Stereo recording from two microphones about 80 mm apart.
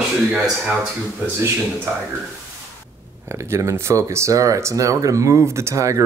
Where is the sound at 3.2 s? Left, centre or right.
Right.